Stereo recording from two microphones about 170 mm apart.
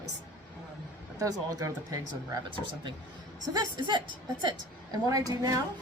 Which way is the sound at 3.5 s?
25° right (ahead or behind).